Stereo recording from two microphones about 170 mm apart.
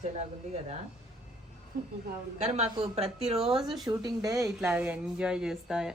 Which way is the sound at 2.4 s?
40° right (ahead or behind).